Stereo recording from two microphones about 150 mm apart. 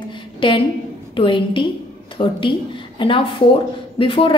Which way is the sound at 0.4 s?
35° left (ahead or behind).